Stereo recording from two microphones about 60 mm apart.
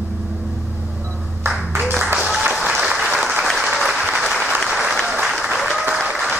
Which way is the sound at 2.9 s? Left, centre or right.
Centre.